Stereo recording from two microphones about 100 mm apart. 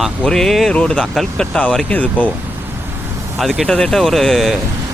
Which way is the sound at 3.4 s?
Centre (ahead or behind).